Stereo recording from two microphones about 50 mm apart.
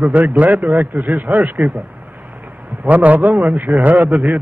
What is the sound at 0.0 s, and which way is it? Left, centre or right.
A man's voice, right.